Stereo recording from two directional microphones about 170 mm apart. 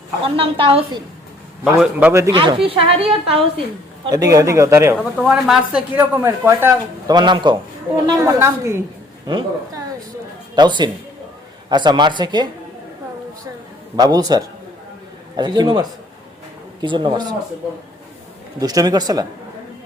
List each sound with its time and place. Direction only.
0.3 s a woman's voice: 30° right (ahead or behind)
1.6 s a woman's voice: 10° right (ahead or behind); by 3.4 s 35° right (ahead or behind)
4.0 s a man's voice: 20° right (ahead or behind)
4.9 s speech: centre (ahead or behind)
7.1 s a man's voice: 25° right (ahead or behind)
13.9 s a man's voice: 25° right (ahead or behind)
18.6 s a man's voice: 20° right (ahead or behind)